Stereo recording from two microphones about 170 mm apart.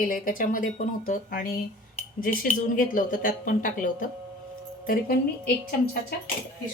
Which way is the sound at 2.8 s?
55° left (ahead or behind).